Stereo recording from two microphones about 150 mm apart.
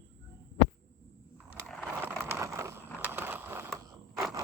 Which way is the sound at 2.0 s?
15° right (ahead or behind).